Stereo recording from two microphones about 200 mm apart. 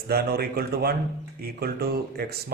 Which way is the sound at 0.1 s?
50° right (ahead or behind).